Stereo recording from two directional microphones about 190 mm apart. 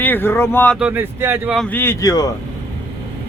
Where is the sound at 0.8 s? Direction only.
10° right (ahead or behind).